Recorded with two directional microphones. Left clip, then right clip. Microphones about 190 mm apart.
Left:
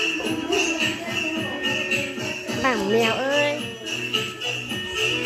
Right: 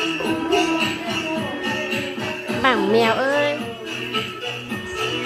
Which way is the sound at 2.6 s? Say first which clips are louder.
Right 4 dB; centre (ahead or behind).